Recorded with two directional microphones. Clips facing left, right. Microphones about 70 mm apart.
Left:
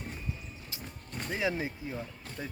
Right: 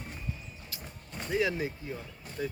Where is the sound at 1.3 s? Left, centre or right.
Left.